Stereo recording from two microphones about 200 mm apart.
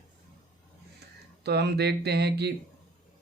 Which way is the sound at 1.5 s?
55° right (ahead or behind).